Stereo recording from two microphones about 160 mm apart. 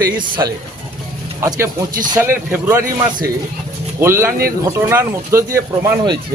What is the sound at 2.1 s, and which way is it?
Speech, 15° right (ahead or behind).